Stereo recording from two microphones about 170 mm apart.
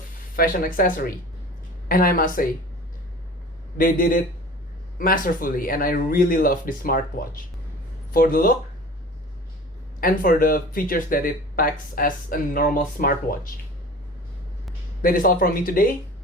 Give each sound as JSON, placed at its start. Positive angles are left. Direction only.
{"t": 0.3, "sound": "speech", "side_deg": 55}
{"t": 3.8, "sound": "speech", "side_deg": 55}
{"t": 10.0, "sound": "speech", "side_deg": 55}
{"t": 15.0, "sound": "speech", "side_deg": 55}